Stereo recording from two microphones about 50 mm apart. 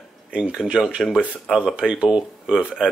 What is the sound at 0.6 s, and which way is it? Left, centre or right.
Speech, centre.